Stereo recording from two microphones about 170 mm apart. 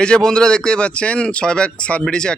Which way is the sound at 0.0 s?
5° left (ahead or behind).